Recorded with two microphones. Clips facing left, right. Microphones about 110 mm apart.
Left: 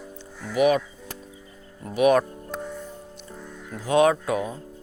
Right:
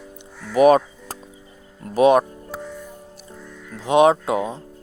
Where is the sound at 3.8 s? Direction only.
20° right (ahead or behind).